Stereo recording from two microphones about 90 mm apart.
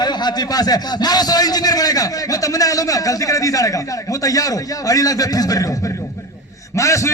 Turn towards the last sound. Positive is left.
turn(degrees=35)  # may be behind; listen again after turning